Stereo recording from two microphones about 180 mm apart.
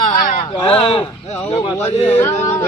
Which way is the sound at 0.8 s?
35° left (ahead or behind).